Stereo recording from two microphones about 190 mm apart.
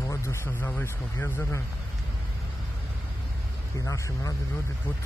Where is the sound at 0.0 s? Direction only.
15° left (ahead or behind).